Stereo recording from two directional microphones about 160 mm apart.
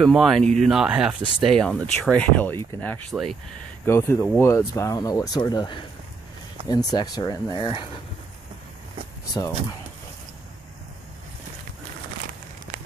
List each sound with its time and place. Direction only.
0.0 s speech: centre (ahead or behind); by 7.8 s 30° left (ahead or behind)